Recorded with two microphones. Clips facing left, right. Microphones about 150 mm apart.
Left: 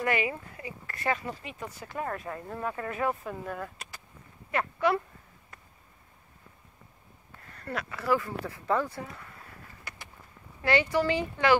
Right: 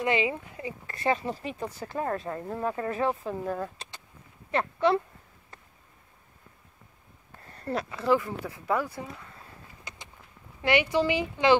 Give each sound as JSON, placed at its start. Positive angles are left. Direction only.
{"t": 0.0, "sound": "speech", "side_deg": -20}
{"t": 7.4, "sound": "speech", "side_deg": -30}
{"t": 9.4, "sound": "a sound", "side_deg": -20}
{"t": 10.6, "sound": "speech", "side_deg": -20}